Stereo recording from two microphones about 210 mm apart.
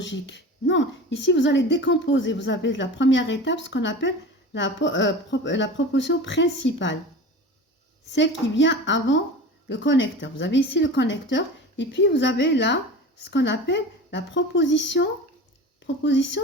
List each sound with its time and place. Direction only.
0.0 s speech: 60° left (ahead or behind)
8.1 s speech: 60° left (ahead or behind)